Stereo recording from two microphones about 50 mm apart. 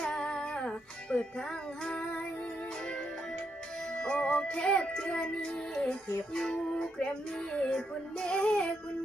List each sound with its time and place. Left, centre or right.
0.0 s female singing: centre
1.1 s music: centre
3.9 s child singing: left